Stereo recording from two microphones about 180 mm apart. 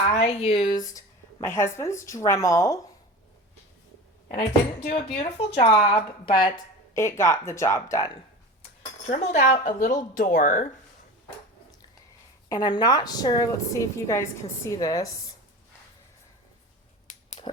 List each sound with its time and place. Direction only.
0.3 s a woman's voice: 35° left (ahead or behind); by 2.8 s 15° left (ahead or behind)
4.8 s speech: 45° left (ahead or behind)
5.0 s a woman's voice: 30° left (ahead or behind)
6.9 s a woman's voice: 15° left (ahead or behind)
9.0 s speech: 40° left (ahead or behind)
12.5 s a woman's voice: 20° left (ahead or behind)
17.4 s pig: 30° left (ahead or behind)